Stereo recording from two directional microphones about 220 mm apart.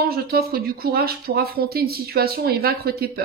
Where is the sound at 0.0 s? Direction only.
45° right (ahead or behind).